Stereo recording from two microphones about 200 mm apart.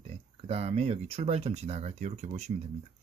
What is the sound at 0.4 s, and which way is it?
Speech, 30° right (ahead or behind).